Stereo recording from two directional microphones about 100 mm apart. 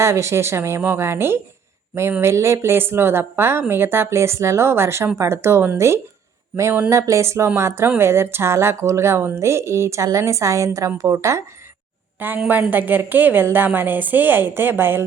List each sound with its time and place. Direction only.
0.0 s speech: 30° right (ahead or behind)
12.2 s speech: 20° right (ahead or behind)